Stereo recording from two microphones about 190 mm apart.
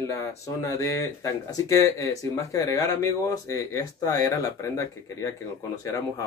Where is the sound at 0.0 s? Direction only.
15° left (ahead or behind).